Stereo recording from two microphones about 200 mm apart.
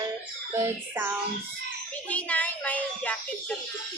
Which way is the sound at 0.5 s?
10° right (ahead or behind).